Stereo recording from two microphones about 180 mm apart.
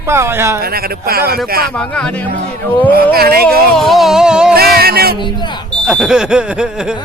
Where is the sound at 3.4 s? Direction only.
Centre (ahead or behind).